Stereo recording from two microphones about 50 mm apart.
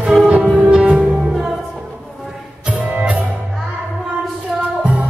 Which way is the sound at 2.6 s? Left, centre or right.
Right.